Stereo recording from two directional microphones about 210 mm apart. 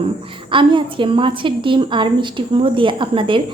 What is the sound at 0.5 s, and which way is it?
A woman's voice, 25° right (ahead or behind).